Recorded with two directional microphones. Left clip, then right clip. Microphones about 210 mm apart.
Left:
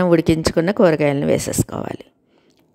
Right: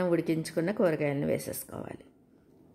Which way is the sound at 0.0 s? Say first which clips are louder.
Left 13 dB; 40° left (ahead or behind).